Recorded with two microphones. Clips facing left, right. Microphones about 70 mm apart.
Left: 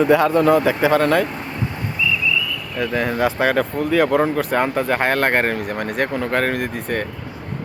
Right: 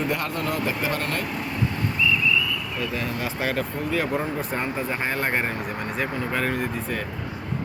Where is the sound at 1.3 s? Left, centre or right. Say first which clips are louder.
Left 1 dB; left.